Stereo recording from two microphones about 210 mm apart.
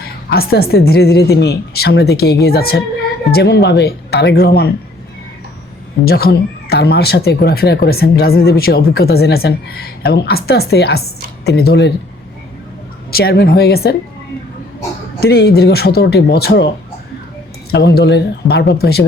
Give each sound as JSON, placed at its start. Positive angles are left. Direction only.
{"t": 0.3, "sound": "speech", "side_deg": 50}
{"t": 6.1, "sound": "speech", "side_deg": 45}
{"t": 13.1, "sound": "speech", "side_deg": 45}
{"t": 15.2, "sound": "speech", "side_deg": 50}
{"t": 17.7, "sound": "speech", "side_deg": 50}